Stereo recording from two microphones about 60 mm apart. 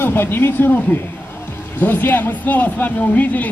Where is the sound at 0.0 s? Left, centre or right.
Left.